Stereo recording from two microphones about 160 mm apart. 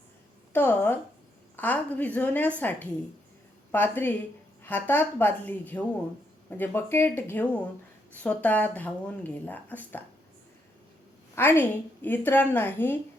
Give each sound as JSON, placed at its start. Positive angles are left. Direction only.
{"t": 0.5, "sound": "speech", "side_deg": 10}
{"t": 11.3, "sound": "speech", "side_deg": 15}